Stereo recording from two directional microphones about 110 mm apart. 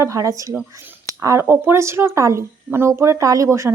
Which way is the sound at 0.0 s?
30° right (ahead or behind).